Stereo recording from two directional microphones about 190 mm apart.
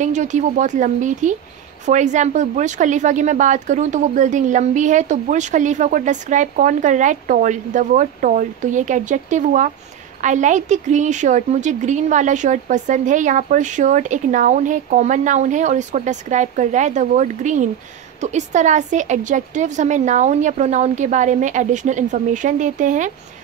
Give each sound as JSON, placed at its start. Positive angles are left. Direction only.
{"t": 0.0, "sound": "a woman's voice", "side_deg": -40}